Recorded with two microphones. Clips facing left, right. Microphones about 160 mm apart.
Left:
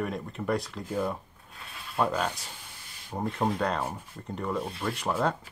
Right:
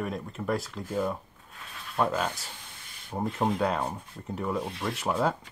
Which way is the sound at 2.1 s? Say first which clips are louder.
Even; 5° right (ahead or behind).